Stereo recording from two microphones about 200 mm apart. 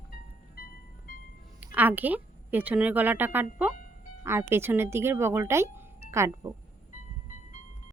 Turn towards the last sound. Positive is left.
turn(degrees=-10)  # may be behind; listen again after turning